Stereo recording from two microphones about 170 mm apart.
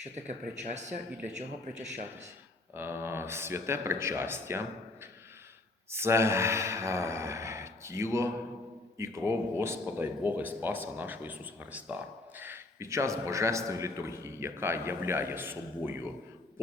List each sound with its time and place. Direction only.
0.5 s a man's voice: 45° right (ahead or behind)
2.7 s a man's voice: 15° right (ahead or behind)
5.9 s a man's voice: 15° right (ahead or behind)